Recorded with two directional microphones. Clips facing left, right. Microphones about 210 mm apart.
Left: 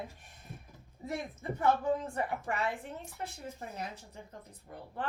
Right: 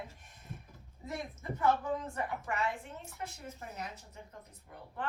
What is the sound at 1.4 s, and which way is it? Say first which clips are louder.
A woman's voice: left 2 dB; 30° left (ahead or behind).